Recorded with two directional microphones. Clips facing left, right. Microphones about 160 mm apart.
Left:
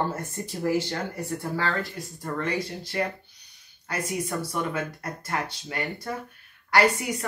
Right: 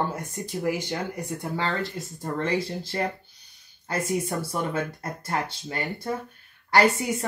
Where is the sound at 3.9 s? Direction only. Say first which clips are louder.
Right 3 dB; 30° right (ahead or behind).